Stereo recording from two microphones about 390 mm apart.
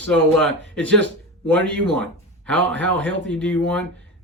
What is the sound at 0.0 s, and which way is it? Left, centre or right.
Speech, centre.